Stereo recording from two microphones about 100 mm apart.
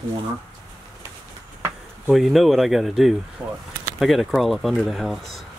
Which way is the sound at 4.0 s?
Centre (ahead or behind).